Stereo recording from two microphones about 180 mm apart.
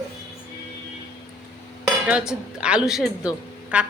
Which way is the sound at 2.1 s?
5° right (ahead or behind).